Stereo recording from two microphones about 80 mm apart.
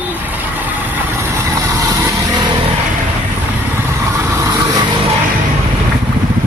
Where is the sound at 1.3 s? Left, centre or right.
Right.